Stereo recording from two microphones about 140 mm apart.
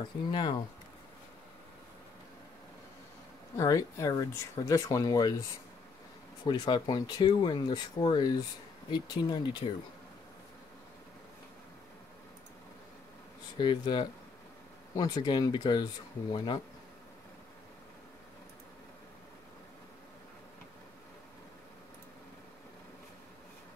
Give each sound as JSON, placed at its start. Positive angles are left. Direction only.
{"t": 0.3, "sound": "speech", "side_deg": 35}
{"t": 3.5, "sound": "speech", "side_deg": 25}
{"t": 6.4, "sound": "speech", "side_deg": 30}
{"t": 13.6, "sound": "speech", "side_deg": 35}